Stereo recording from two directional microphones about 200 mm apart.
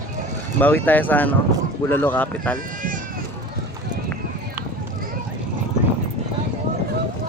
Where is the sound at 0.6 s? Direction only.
10° left (ahead or behind).